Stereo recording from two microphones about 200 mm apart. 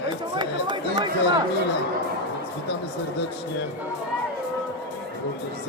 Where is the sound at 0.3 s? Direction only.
20° right (ahead or behind).